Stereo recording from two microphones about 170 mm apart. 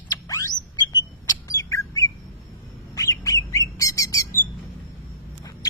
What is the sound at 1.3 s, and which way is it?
Bird, 20° left (ahead or behind).